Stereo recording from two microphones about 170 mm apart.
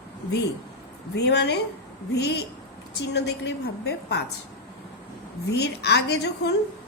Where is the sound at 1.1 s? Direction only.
85° left.